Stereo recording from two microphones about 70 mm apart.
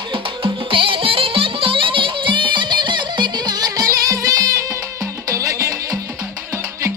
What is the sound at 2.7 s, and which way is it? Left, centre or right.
Music, right.